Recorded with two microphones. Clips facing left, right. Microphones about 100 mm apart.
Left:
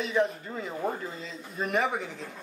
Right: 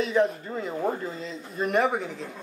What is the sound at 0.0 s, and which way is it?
Speech, centre (ahead or behind).